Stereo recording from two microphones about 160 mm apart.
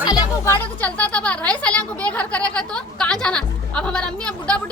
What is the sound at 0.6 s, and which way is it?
Speech, 10° left (ahead or behind).